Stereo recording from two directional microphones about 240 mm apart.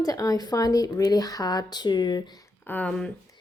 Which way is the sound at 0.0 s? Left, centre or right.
Centre.